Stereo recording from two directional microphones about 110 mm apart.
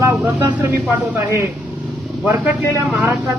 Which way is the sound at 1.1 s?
15° right (ahead or behind).